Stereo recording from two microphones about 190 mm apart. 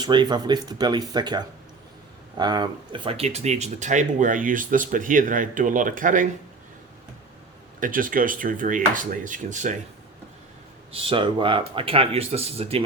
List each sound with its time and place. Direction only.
0.0 s speech: 25° right (ahead or behind); by 6.2 s 45° right (ahead or behind)
7.8 s speech: 45° right (ahead or behind)
10.9 s speech: 30° right (ahead or behind)